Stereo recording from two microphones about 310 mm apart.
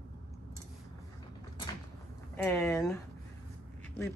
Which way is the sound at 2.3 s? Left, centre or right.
Centre.